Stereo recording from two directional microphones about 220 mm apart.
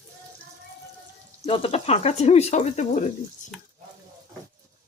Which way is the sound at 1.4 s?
25° left (ahead or behind).